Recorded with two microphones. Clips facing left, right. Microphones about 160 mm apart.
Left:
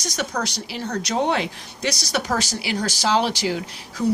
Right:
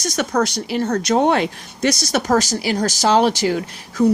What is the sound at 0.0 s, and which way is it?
A woman's voice, 50° right (ahead or behind).